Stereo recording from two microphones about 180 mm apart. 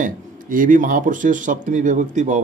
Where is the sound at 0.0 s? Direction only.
50° right (ahead or behind).